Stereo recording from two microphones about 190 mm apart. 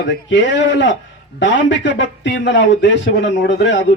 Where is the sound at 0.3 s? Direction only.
75° left (ahead or behind).